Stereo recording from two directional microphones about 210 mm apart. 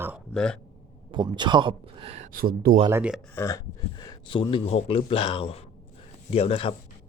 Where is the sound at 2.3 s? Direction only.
45° right (ahead or behind).